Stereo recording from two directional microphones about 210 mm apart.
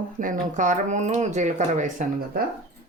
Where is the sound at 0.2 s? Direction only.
40° right (ahead or behind).